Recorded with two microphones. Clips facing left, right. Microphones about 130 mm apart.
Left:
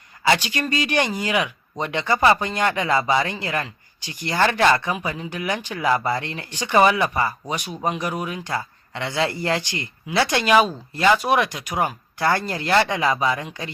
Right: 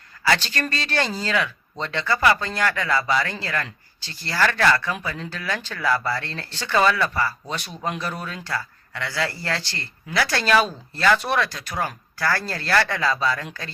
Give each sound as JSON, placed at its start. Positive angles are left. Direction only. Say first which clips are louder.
{"t": 0.3, "sound": "speech", "louder": "left 2 dB", "side_deg": 15}